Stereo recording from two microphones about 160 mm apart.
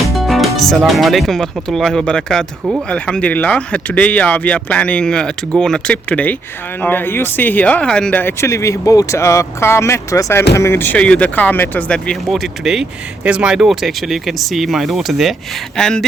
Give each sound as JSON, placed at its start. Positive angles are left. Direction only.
{"t": 0.0, "sound": "speech", "side_deg": 0}